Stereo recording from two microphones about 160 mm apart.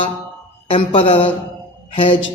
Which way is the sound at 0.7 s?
35° left (ahead or behind).